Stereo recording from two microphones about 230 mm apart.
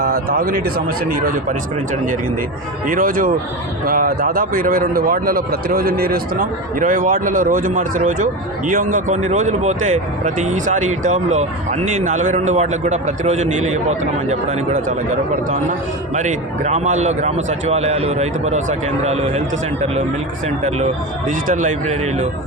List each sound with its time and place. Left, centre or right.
0.0 s a man's voice: right
16.1 s a man's voice: right
20.7 s a man's voice: right